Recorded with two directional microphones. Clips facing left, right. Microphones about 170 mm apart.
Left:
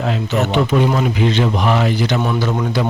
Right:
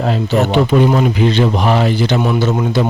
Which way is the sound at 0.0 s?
35° right (ahead or behind).